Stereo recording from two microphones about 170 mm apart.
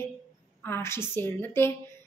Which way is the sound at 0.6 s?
15° left (ahead or behind).